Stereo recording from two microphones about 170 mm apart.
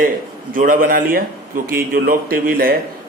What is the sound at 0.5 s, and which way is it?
A man's voice, 55° right (ahead or behind).